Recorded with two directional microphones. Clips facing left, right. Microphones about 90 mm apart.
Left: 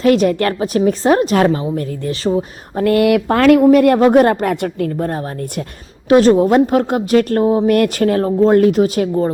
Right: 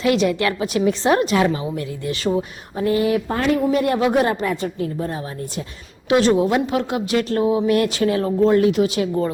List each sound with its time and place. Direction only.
0.0 s a woman's voice: 45° left (ahead or behind)
2.7 s speech: 70° left (ahead or behind)
6.1 s a woman's voice: 40° left (ahead or behind)